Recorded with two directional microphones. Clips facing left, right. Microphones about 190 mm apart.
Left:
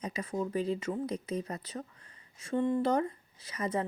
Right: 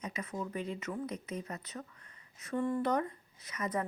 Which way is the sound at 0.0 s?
30° left (ahead or behind).